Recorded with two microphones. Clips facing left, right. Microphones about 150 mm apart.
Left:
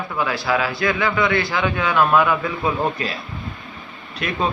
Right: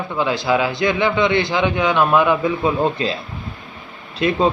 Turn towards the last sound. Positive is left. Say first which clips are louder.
# right 6 dB
turn(degrees=-25)  # may be behind; listen again after turning